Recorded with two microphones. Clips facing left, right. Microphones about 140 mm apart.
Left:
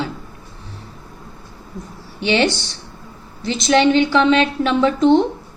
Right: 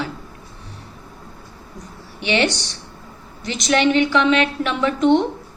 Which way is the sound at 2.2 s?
30° left (ahead or behind).